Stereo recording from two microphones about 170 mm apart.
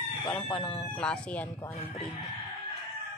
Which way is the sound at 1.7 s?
35° left (ahead or behind).